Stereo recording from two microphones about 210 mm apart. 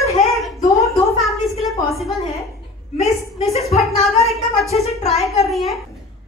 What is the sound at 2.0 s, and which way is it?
Speech, centre (ahead or behind).